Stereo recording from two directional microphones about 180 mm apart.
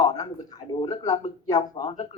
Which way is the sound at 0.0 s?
20° left (ahead or behind).